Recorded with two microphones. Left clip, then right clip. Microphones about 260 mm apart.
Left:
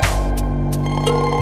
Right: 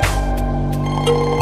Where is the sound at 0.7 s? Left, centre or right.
Left.